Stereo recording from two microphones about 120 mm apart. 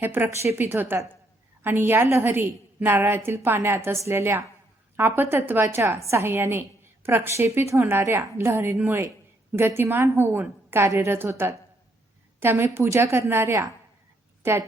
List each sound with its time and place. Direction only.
0.0 s a woman's voice: 15° right (ahead or behind)